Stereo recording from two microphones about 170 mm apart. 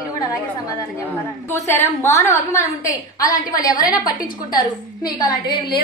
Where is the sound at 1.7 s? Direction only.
15° left (ahead or behind).